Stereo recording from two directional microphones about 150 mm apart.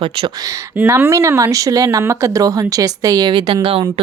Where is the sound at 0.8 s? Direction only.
15° right (ahead or behind).